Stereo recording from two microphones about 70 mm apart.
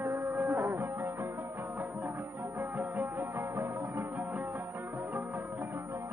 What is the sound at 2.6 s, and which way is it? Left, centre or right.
Music, right.